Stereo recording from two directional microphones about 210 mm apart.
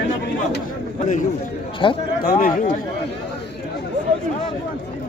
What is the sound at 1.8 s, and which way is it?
Speech, 25° left (ahead or behind).